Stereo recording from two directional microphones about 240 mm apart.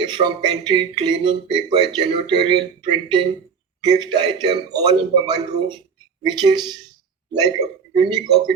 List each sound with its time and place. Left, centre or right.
0.0 s a man's voice: centre